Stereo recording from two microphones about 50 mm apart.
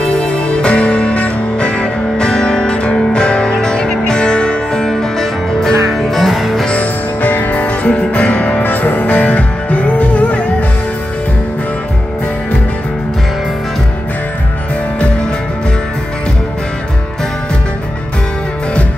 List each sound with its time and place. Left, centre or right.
0.2 s music: centre
4.8 s music: centre
6.8 s music: left
8.6 s music: left